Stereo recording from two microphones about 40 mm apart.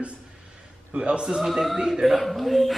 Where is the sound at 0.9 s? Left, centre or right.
Right.